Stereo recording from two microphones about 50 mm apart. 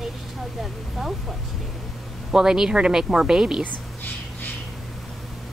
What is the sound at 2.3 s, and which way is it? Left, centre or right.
A woman's voice, centre.